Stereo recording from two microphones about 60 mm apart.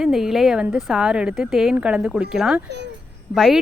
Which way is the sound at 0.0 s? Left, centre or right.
Centre.